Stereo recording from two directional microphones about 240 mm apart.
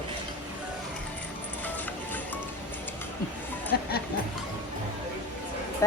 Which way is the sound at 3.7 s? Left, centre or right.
Left.